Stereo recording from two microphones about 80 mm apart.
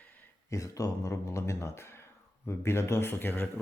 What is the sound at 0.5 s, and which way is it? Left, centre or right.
Speech, left.